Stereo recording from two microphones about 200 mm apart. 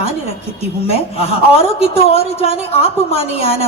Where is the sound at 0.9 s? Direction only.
30° left (ahead or behind).